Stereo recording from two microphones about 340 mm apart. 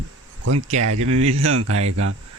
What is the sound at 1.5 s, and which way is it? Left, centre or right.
Speech, right.